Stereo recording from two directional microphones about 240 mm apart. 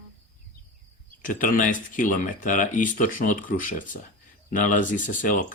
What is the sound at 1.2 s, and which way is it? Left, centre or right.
Speech, left.